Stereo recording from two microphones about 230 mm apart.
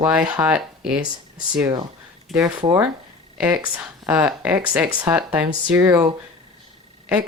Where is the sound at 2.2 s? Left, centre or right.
Centre.